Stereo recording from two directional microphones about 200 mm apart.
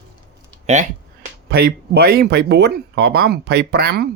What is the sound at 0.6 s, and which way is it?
Speech, 35° right (ahead or behind).